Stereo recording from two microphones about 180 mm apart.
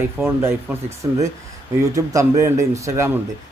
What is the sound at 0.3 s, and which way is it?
Speech, 15° right (ahead or behind).